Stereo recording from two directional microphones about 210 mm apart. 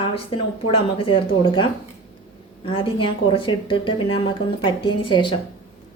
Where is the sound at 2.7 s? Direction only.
25° left (ahead or behind).